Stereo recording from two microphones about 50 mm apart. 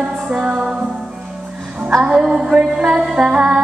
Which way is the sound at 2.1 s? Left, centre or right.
Centre.